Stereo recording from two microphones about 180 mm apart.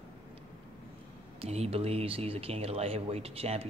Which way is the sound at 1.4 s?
35° right (ahead or behind).